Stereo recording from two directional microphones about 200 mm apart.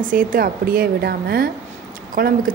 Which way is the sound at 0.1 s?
45° right (ahead or behind).